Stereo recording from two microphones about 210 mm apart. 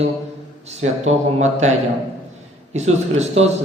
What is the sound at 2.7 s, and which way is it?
Speech, 30° right (ahead or behind).